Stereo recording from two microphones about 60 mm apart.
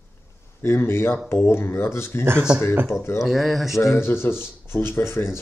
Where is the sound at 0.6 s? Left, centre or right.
Left.